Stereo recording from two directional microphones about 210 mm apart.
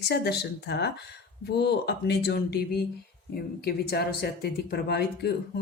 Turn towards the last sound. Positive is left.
turn(degrees=50)  # may be behind; listen again after turning